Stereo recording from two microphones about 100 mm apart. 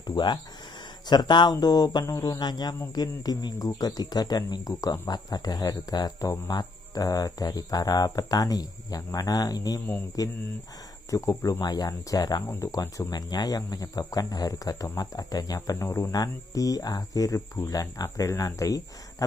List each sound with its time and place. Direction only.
0.0 s a sound: 45° left (ahead or behind)
1.0 s speech: 45° left (ahead or behind); by 13.1 s 30° left (ahead or behind)
13.1 s speech: 40° left (ahead or behind)